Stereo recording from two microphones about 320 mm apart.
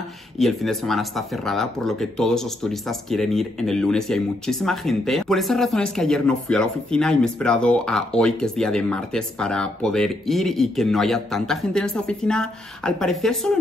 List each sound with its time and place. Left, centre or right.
0.4 s speech: centre